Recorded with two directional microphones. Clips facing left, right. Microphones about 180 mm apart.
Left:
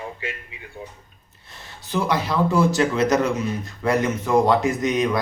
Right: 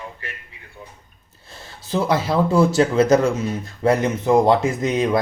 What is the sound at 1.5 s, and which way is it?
Speech, 25° right (ahead or behind).